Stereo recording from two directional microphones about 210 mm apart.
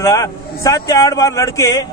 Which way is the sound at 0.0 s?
15° left (ahead or behind).